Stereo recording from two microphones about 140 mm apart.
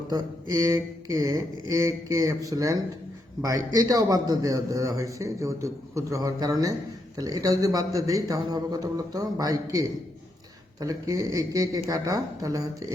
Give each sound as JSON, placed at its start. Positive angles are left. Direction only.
{"t": 0.1, "sound": "a man's voice", "side_deg": -25}